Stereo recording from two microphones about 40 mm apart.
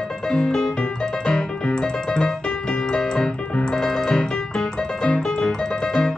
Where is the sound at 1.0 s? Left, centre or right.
Centre.